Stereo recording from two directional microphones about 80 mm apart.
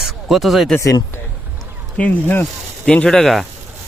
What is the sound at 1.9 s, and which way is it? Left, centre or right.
Speech, left.